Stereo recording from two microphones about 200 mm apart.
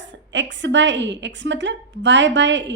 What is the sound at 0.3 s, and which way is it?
A woman's voice, 65° right (ahead or behind).